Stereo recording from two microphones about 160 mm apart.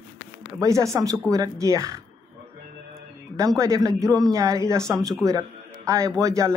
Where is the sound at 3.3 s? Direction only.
20° right (ahead or behind).